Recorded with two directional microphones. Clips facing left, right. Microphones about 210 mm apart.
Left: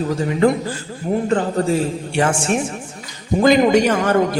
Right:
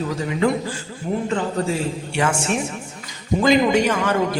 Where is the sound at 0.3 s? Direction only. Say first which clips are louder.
Left 4 dB; 40° left (ahead or behind).